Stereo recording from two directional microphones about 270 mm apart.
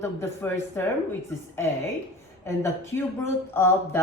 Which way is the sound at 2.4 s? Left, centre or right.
Centre.